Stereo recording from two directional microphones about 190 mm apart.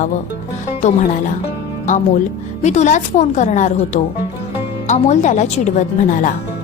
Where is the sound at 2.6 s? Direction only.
35° left (ahead or behind).